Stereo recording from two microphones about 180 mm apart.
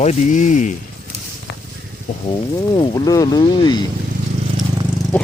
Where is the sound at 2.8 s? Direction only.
20° left (ahead or behind).